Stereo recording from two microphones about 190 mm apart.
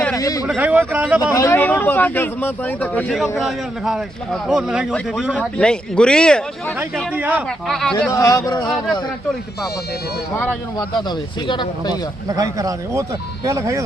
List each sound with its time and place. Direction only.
0.2 s speech: 20° left (ahead or behind)
0.4 s speech: 5° right (ahead or behind)
1.2 s a man's voice: 15° left (ahead or behind)
7.1 s speech: 10° right (ahead or behind)
7.7 s a man's voice: centre (ahead or behind)
8.1 s speech: 15° left (ahead or behind)
10.3 s a man's voice: 10° left (ahead or behind)
11.4 s speech: 25° left (ahead or behind)
12.4 s speech: 20° right (ahead or behind)